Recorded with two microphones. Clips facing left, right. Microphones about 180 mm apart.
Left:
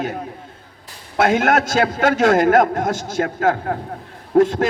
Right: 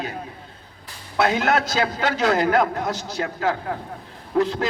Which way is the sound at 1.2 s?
50° left (ahead or behind).